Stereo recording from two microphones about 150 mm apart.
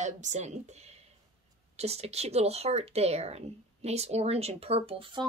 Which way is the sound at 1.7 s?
45° right (ahead or behind).